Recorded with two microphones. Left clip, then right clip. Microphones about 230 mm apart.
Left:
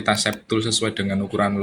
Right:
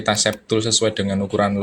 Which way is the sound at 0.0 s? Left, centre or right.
Centre.